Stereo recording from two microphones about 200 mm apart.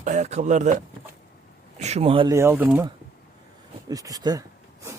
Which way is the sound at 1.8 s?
35° right (ahead or behind).